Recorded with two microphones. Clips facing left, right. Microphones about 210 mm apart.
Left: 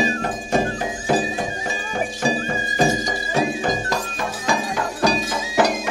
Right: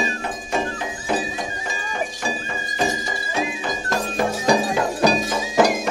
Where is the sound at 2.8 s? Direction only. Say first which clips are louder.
Left 4 dB; 40° left (ahead or behind).